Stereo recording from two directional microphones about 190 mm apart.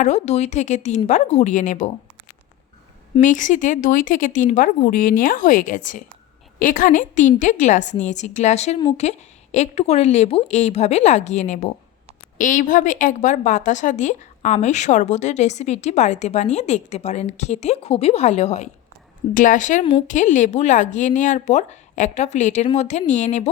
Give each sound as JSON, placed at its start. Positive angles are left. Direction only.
{"t": 0.0, "sound": "a woman's voice", "side_deg": 35}
{"t": 3.2, "sound": "a woman's voice", "side_deg": 40}